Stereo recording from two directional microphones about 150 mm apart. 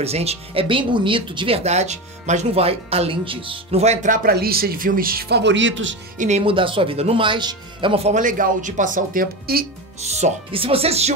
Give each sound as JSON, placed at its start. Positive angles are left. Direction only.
{"t": 0.0, "sound": "speech", "side_deg": -45}
{"t": 6.1, "sound": "speech", "side_deg": -50}
{"t": 6.4, "sound": "speech", "side_deg": -35}
{"t": 8.2, "sound": "speech", "side_deg": -60}
{"t": 10.0, "sound": "speech", "side_deg": -45}